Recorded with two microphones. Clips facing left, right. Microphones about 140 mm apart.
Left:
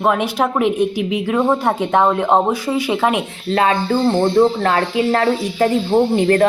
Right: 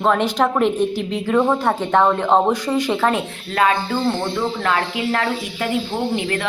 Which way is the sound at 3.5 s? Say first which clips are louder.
Left 3 dB; 30° left (ahead or behind).